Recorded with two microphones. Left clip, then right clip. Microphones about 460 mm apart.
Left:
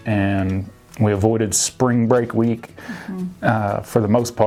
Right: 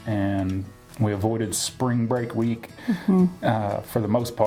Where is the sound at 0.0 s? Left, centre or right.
Left.